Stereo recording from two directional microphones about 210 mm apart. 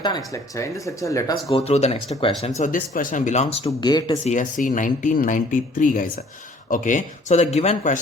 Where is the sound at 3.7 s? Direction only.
20° left (ahead or behind).